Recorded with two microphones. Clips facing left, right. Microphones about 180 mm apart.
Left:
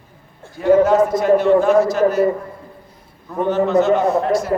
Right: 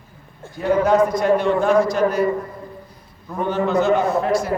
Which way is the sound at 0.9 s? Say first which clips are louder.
Left 2 dB; 5° left (ahead or behind).